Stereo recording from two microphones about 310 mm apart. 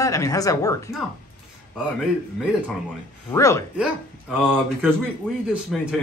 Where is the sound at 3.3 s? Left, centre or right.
Centre.